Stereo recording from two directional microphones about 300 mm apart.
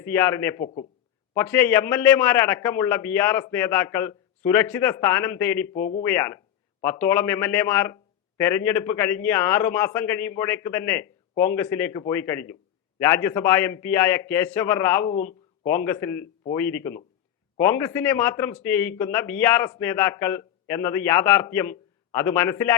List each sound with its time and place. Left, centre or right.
0.0 s a man's voice: centre